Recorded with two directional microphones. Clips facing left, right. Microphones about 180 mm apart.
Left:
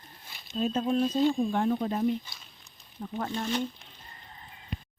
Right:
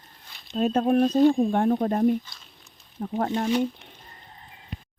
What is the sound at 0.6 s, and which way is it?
Speech, 65° right (ahead or behind).